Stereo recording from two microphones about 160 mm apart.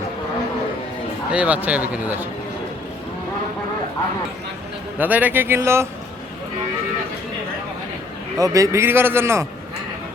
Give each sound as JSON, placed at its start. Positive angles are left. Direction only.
{"t": 1.3, "sound": "a man's voice", "side_deg": -10}
{"t": 4.9, "sound": "a man's voice", "side_deg": -10}
{"t": 8.4, "sound": "a man's voice", "side_deg": -20}